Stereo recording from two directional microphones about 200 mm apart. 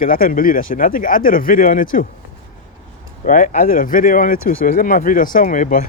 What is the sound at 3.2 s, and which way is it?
Speech, 40° left (ahead or behind).